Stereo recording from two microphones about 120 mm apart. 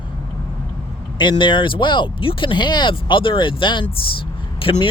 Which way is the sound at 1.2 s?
40° left (ahead or behind).